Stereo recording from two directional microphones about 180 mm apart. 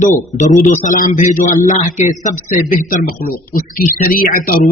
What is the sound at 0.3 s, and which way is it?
A man's voice, 40° left (ahead or behind).